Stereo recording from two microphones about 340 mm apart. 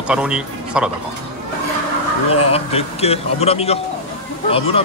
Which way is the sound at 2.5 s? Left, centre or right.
Centre.